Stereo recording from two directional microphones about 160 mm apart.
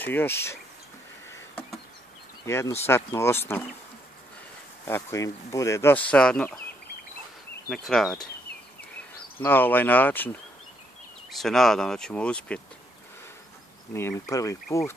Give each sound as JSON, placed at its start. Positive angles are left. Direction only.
{"t": 0.0, "sound": "speech", "side_deg": 10}
{"t": 2.4, "sound": "speech", "side_deg": 15}
{"t": 4.8, "sound": "speech", "side_deg": 15}
{"t": 7.7, "sound": "speech", "side_deg": 0}
{"t": 9.4, "sound": "speech", "side_deg": 10}
{"t": 13.9, "sound": "speech", "side_deg": 15}